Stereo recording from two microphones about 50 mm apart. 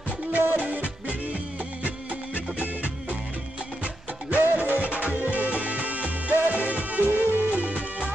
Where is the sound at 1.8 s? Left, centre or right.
Right.